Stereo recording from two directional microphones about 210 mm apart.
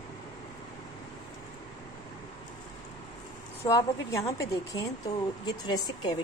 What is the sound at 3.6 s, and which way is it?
Speech, 15° left (ahead or behind).